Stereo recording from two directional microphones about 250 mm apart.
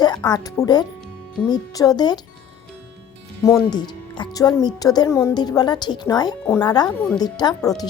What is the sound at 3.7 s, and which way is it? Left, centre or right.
A woman's voice, centre.